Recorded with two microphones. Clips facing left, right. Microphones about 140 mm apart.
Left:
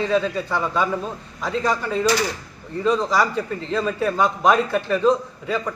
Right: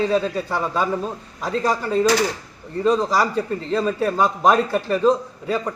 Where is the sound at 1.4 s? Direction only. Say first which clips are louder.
Right 1 dB; 35° right (ahead or behind).